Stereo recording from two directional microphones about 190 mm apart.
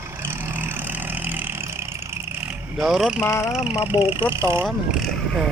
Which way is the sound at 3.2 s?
15° left (ahead or behind).